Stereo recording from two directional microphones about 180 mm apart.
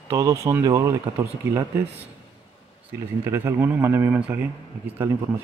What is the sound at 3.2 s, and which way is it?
A man's voice, 15° right (ahead or behind).